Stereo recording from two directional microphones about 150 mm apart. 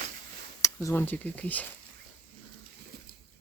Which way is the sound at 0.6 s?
20° left (ahead or behind).